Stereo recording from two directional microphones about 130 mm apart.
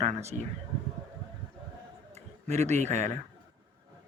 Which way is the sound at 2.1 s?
60° right (ahead or behind).